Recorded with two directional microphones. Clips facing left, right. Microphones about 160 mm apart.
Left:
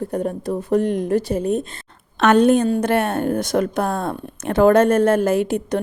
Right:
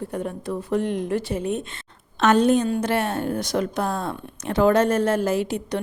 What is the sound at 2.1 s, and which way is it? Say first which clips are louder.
A woman's voice: left 4 dB; 60° left (ahead or behind).